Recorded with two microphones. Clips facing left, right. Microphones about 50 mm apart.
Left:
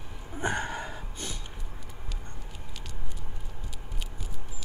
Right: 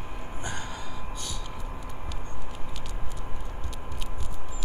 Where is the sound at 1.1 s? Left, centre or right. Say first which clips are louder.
Right 2 dB; left.